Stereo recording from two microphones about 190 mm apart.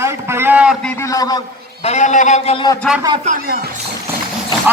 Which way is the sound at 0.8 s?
10° left (ahead or behind).